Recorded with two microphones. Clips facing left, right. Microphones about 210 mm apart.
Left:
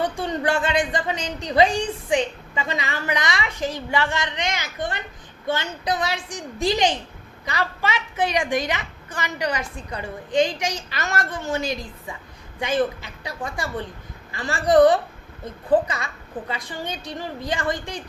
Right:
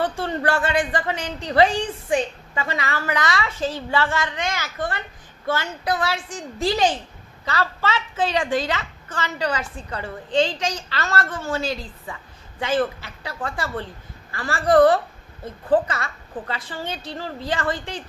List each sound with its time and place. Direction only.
0.0 s a child's voice: 15° left (ahead or behind)